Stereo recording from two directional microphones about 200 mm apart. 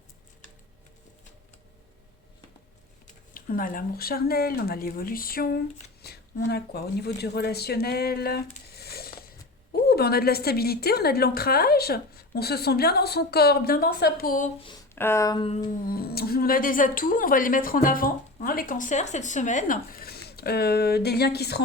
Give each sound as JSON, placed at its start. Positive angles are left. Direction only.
{"t": 3.3, "sound": "speech", "side_deg": 45}
{"t": 14.9, "sound": "speech", "side_deg": 10}
{"t": 15.9, "sound": "speech", "side_deg": 50}